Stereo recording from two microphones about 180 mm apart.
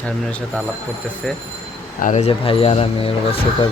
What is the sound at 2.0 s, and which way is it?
Speech, 40° left (ahead or behind).